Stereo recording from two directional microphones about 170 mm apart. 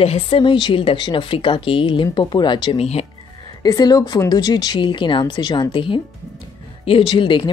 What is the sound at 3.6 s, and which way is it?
A woman's voice, 25° left (ahead or behind).